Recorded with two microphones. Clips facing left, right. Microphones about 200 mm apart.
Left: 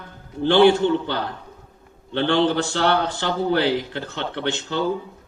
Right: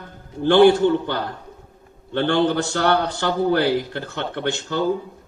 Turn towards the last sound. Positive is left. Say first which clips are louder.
# right 1 dB
turn(degrees=-50)  # may be behind; listen again after turning